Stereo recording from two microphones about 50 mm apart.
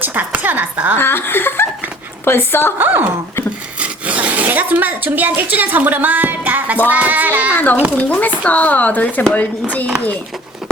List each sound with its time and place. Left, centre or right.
0.0 s speech: right
0.9 s speech: left
2.7 s speech: right
3.8 s speech: right
7.5 s speech: left